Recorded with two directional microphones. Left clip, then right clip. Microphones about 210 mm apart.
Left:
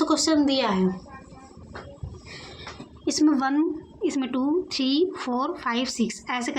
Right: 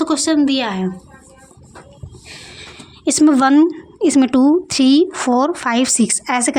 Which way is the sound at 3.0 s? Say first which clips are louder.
Right 10 dB; 50° right (ahead or behind).